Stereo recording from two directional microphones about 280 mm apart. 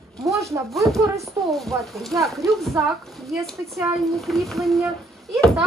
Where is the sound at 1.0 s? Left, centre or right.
Centre.